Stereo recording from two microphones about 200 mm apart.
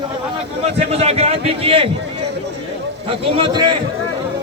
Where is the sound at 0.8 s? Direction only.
30° right (ahead or behind).